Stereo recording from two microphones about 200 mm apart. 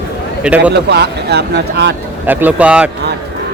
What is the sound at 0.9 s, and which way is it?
Speech, 55° right (ahead or behind).